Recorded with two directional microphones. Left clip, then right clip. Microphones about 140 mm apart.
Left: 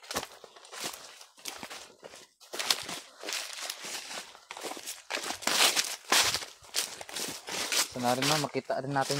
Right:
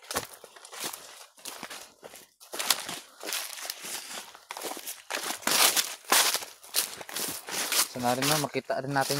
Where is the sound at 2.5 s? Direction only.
45° right (ahead or behind).